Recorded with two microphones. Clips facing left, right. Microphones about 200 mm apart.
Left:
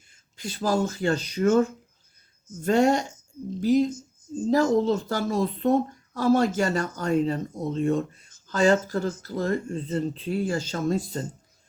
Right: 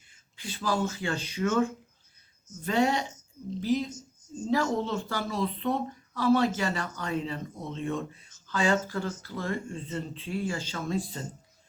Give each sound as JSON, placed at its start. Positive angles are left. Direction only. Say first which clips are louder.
{"t": 0.3, "sound": "speech", "louder": "left 5 dB", "side_deg": 40}